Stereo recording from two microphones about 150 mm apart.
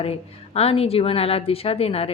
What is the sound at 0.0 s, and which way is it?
A woman's voice, 40° left (ahead or behind).